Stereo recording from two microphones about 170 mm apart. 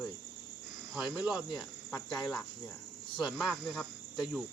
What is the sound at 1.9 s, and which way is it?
Cricket, 25° left (ahead or behind).